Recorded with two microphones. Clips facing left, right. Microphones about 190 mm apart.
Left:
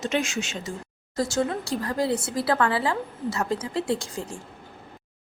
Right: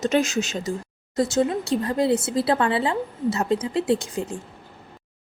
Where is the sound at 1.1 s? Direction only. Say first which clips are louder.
Right 4 dB; 20° right (ahead or behind).